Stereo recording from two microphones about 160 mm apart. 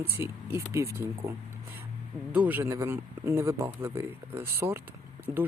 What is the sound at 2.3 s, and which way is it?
Speech, 10° right (ahead or behind).